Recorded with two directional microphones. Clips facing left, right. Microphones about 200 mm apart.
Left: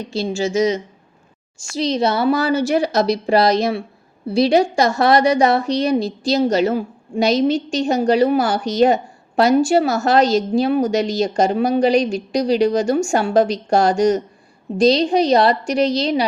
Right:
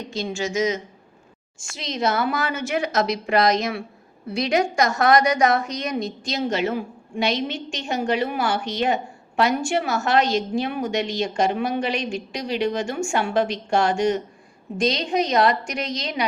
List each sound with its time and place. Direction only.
0.1 s a woman's voice: 30° left (ahead or behind)